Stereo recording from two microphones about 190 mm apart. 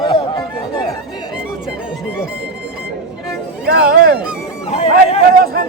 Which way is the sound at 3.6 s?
60° right (ahead or behind).